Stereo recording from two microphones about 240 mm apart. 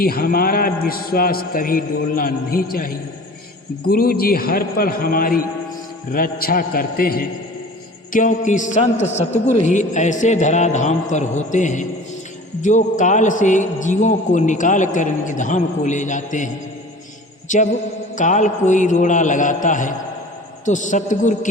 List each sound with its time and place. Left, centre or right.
0.0 s a man's voice: left
17.5 s a man's voice: left